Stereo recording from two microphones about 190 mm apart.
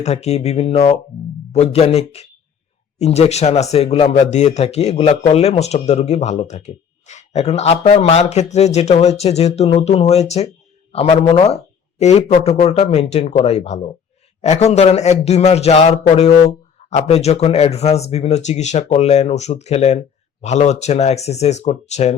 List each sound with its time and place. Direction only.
0.0 s speech: 35° left (ahead or behind)